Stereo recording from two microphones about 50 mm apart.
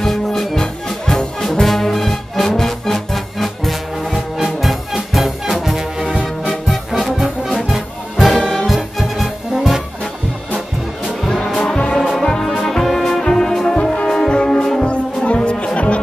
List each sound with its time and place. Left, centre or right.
0.0 s brass instrument: centre
6.9 s music: centre
11.2 s music: centre
13.7 s brass instrument: centre
15.2 s music: left